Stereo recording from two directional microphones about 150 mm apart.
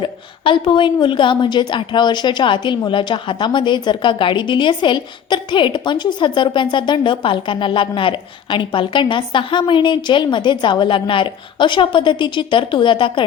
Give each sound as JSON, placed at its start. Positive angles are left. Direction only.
{"t": 0.0, "sound": "a woman's voice", "side_deg": 30}